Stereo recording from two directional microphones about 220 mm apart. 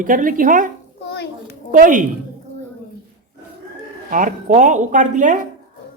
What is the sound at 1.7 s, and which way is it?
Speech, 35° right (ahead or behind).